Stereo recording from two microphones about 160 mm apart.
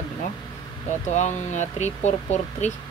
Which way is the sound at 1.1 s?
50° left (ahead or behind).